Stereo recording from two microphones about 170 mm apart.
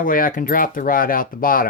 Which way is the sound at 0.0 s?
55° left (ahead or behind).